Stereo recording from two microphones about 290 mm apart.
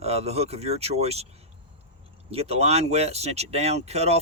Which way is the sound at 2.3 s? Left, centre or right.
Right.